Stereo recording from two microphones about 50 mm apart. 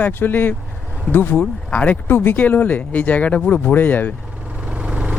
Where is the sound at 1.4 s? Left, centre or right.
Left.